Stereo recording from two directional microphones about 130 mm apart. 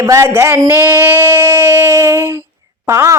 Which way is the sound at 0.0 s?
25° right (ahead or behind).